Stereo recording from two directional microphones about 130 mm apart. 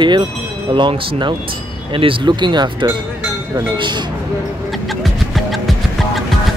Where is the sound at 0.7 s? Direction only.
35° right (ahead or behind).